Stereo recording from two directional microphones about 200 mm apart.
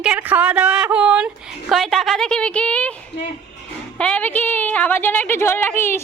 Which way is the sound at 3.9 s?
5° left (ahead or behind).